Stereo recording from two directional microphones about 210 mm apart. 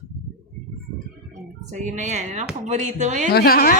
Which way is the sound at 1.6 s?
35° right (ahead or behind).